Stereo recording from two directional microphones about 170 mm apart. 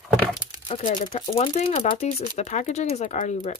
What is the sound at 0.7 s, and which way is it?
Speech, 35° left (ahead or behind).